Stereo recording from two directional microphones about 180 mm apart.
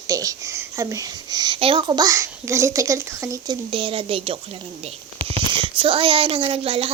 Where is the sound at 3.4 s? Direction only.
30° right (ahead or behind).